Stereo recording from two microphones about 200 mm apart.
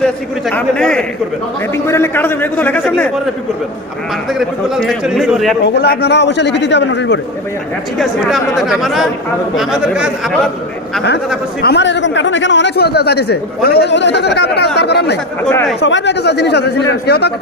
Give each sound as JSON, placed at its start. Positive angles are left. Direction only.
{"t": 0.0, "sound": "speech", "side_deg": 5}
{"t": 4.4, "sound": "speech", "side_deg": 0}
{"t": 5.6, "sound": "a man's voice", "side_deg": 55}
{"t": 7.9, "sound": "speech", "side_deg": 0}
{"t": 11.6, "sound": "a man's voice", "side_deg": 60}
{"t": 15.4, "sound": "speech", "side_deg": 5}
{"t": 15.8, "sound": "a man's voice", "side_deg": 60}